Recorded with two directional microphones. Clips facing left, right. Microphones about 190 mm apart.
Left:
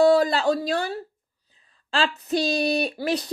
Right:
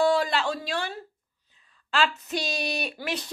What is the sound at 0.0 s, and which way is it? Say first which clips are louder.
Speech: left 6 dB; 40° left (ahead or behind).